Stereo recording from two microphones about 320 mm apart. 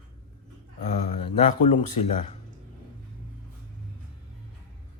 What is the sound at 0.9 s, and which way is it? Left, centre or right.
Speech, left.